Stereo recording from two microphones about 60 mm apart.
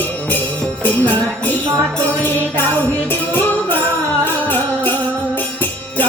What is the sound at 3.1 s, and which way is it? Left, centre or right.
Music, left.